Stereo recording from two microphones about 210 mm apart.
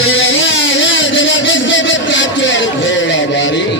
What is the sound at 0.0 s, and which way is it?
Music, 65° left (ahead or behind).